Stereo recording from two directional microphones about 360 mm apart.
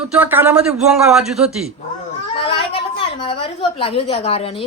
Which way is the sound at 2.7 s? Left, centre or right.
Centre.